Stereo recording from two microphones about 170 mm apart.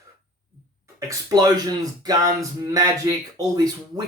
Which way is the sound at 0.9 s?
20° right (ahead or behind).